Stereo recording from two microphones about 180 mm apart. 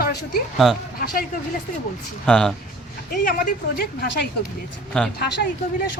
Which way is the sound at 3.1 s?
50° left (ahead or behind).